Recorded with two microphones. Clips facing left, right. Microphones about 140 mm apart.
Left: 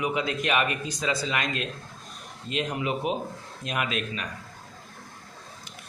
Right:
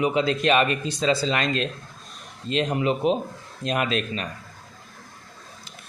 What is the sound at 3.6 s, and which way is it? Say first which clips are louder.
Speech: right 7 dB; 10° left (ahead or behind).